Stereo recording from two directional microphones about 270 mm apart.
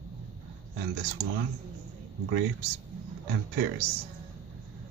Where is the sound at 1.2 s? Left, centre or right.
Right.